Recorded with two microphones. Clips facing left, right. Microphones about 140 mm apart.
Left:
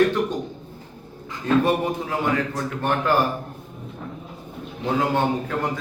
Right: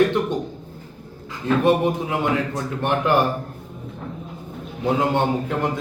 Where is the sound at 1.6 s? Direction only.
20° right (ahead or behind).